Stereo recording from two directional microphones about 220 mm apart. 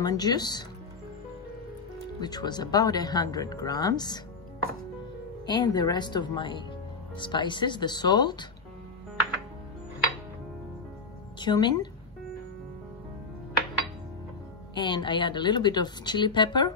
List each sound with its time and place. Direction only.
0.0 s speech: 20° left (ahead or behind)
2.1 s speech: 20° left (ahead or behind)
5.5 s a woman's voice: 20° left (ahead or behind)
11.3 s a woman's voice: 20° left (ahead or behind)
14.7 s a woman's voice: 20° left (ahead or behind)